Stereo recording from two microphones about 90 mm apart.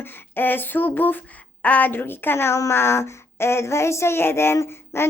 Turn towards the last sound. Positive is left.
turn(degrees=30)  # may be behind; listen again after turning